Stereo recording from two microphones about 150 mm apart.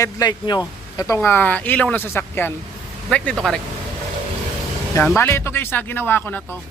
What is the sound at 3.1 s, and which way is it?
Speech, 5° left (ahead or behind).